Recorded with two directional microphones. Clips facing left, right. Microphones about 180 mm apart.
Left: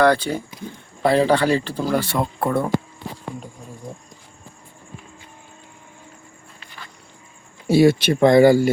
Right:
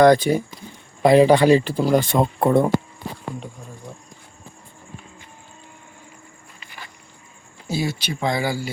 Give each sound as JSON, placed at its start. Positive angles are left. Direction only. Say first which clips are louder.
{"t": 0.0, "sound": "speech", "louder": "right 4 dB", "side_deg": -15}
{"t": 7.7, "sound": "speech", "louder": "left 11 dB", "side_deg": 60}